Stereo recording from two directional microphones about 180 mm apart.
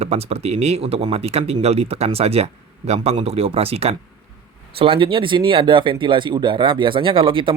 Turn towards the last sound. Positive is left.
turn(degrees=-30)  # may be behind; listen again after turning